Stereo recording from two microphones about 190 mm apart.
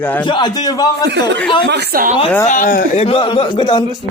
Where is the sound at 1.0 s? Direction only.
65° right (ahead or behind).